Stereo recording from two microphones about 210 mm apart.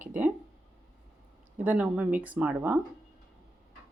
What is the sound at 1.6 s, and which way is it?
Speech, 5° right (ahead or behind).